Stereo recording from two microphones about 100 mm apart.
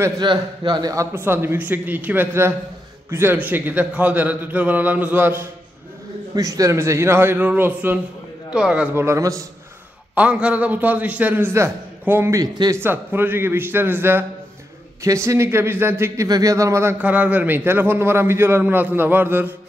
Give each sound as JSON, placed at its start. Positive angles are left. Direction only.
{"t": 0.2, "sound": "a man's voice", "side_deg": -45}
{"t": 0.9, "sound": "a man's voice", "side_deg": -20}
{"t": 6.3, "sound": "a man's voice", "side_deg": -35}
{"t": 8.9, "sound": "a man's voice", "side_deg": -30}
{"t": 10.1, "sound": "a man's voice", "side_deg": -10}
{"t": 12.4, "sound": "speech", "side_deg": -40}
{"t": 12.7, "sound": "a man's voice", "side_deg": -20}
{"t": 16.3, "sound": "speech", "side_deg": -40}
{"t": 17.0, "sound": "a man's voice", "side_deg": -15}